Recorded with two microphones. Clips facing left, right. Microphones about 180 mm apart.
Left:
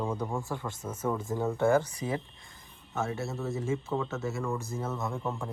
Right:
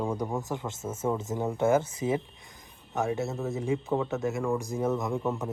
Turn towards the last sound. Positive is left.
turn(degrees=-5)  # may be behind; listen again after turning